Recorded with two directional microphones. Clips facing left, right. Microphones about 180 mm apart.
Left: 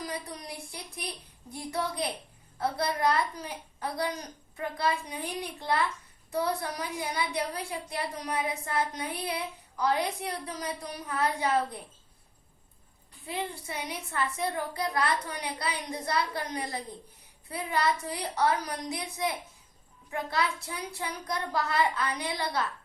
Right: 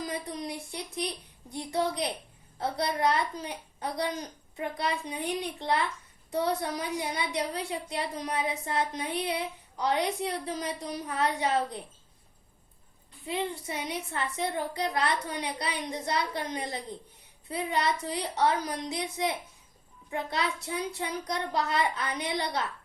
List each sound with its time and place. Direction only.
0.1 s a sound: 20° right (ahead or behind)
1.5 s a woman's voice: 20° right (ahead or behind)
13.2 s a woman's voice: 20° right (ahead or behind)